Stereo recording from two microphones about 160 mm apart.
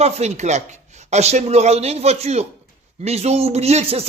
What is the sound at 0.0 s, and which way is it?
Speech, 40° right (ahead or behind).